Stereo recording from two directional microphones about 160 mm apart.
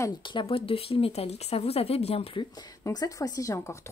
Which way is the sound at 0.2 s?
30° left (ahead or behind).